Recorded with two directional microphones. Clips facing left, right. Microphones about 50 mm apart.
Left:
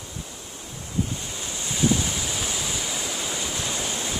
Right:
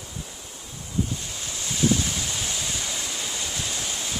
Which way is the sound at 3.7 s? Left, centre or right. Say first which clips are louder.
Left 3 dB; centre.